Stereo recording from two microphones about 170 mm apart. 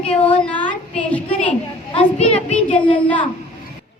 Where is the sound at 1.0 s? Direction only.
10° left (ahead or behind).